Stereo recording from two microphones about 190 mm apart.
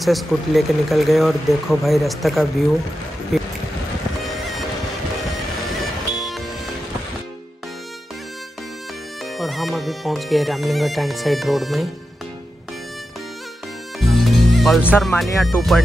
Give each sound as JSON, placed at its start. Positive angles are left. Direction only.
{"t": 0.0, "sound": "speech", "side_deg": 0}
{"t": 6.1, "sound": "music", "side_deg": 0}
{"t": 9.2, "sound": "music", "side_deg": 0}
{"t": 13.9, "sound": "music", "side_deg": 0}
{"t": 15.4, "sound": "speech", "side_deg": 0}